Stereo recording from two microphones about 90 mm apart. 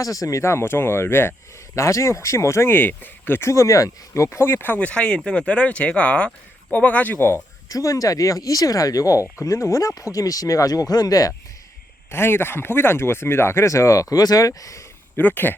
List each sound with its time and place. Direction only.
0.0 s speech: 40° left (ahead or behind); by 7.3 s 25° left (ahead or behind)
7.7 s speech: 40° left (ahead or behind)
12.1 s speech: 25° left (ahead or behind)
15.1 s speech: 20° left (ahead or behind)